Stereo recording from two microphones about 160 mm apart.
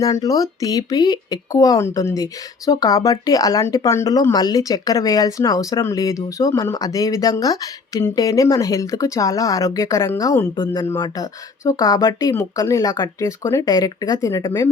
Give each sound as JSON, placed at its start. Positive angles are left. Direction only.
{"t": 0.0, "sound": "speech", "side_deg": 20}